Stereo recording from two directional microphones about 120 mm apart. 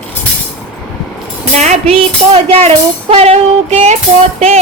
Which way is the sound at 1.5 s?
70° right (ahead or behind).